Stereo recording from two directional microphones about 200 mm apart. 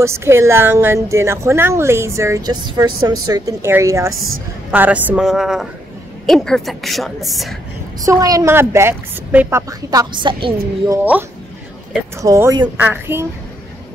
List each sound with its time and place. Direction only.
0.0 s a woman's voice: 15° right (ahead or behind)
8.0 s a woman's voice: 15° right (ahead or behind)
12.2 s a woman's voice: 15° right (ahead or behind)